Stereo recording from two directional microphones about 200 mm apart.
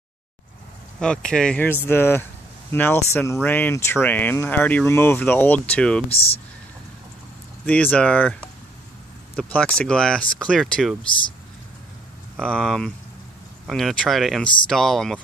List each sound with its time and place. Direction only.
0.9 s speech: 5° left (ahead or behind)
6.0 s speech: 30° left (ahead or behind)
7.6 s speech: 5° left (ahead or behind)
12.4 s speech: 5° left (ahead or behind)